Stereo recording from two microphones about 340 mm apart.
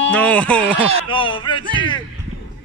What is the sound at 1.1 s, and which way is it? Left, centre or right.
Speech, centre.